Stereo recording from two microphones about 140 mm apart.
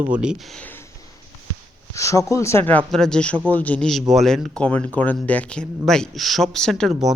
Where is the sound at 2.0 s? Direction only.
20° left (ahead or behind).